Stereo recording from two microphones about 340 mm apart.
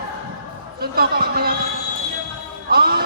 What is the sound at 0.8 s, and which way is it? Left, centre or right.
Speech, right.